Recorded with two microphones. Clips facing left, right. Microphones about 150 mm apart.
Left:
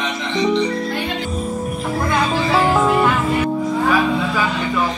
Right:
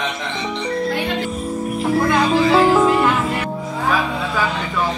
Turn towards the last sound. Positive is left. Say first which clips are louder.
# right 1 dB
turn(degrees=0)  # may be behind; listen again after turning